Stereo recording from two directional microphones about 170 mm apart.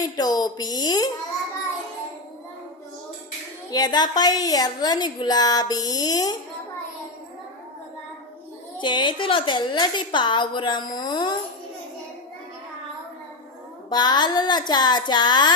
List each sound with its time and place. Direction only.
0.0 s a woman's voice: 25° left (ahead or behind)
3.7 s a woman's voice: 25° left (ahead or behind)
8.8 s a woman's voice: 30° left (ahead or behind)
13.9 s a woman's voice: 25° left (ahead or behind)